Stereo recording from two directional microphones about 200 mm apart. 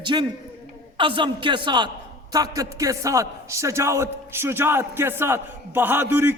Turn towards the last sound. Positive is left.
turn(degrees=-10)  # may be behind; listen again after turning